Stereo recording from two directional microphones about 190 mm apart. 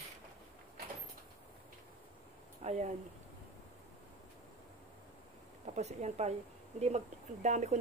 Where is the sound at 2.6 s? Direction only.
35° right (ahead or behind).